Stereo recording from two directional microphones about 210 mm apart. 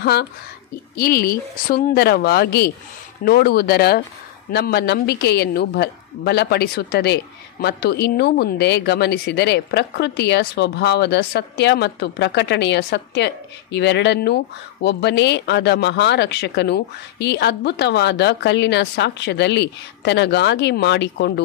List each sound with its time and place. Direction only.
0.0 s speech: 50° left (ahead or behind)